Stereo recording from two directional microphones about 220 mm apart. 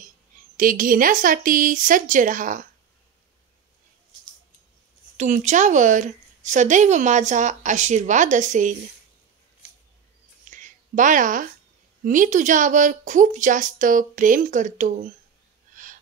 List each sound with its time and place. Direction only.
0.6 s speech: 40° right (ahead or behind)
5.1 s speech: 35° right (ahead or behind)
10.5 s a sound: 35° right (ahead or behind)
12.0 s speech: 35° right (ahead or behind)
15.7 s wheeze: 35° right (ahead or behind)